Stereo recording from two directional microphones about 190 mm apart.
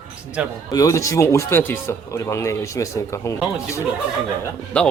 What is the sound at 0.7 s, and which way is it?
Speech, 20° left (ahead or behind).